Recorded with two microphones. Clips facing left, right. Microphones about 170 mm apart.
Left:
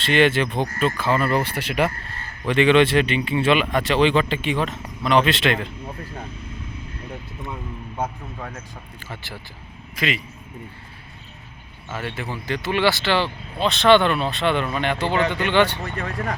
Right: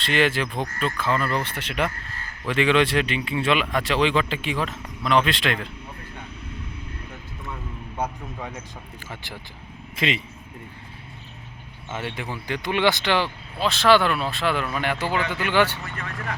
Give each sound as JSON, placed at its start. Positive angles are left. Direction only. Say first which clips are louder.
{"t": 0.0, "sound": "speech", "louder": "left 4 dB", "side_deg": 0}
{"t": 0.4, "sound": "speech", "louder": "left 4 dB", "side_deg": 25}
{"t": 0.9, "sound": "speech", "louder": "left 2 dB", "side_deg": 5}
{"t": 7.9, "sound": "speech", "louder": "left 1 dB", "side_deg": 10}
{"t": 9.0, "sound": "speech", "louder": "left 2 dB", "side_deg": -15}
{"t": 9.9, "sound": "speech", "louder": "even", "side_deg": -25}
{"t": 11.9, "sound": "speech", "louder": "left 1 dB", "side_deg": -15}
{"t": 13.6, "sound": "speech", "louder": "left 3 dB", "side_deg": 0}
{"t": 15.8, "sound": "speech", "louder": "left 6 dB", "side_deg": 35}